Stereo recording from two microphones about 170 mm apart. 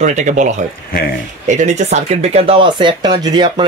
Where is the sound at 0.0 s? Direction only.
45° right (ahead or behind).